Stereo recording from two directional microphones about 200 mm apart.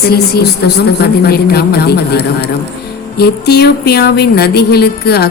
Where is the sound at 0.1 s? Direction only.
50° left (ahead or behind).